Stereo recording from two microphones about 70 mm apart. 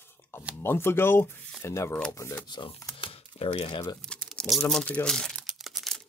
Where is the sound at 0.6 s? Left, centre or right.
Left.